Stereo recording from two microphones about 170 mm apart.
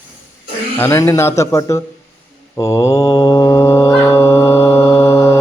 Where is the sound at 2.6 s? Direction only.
20° left (ahead or behind).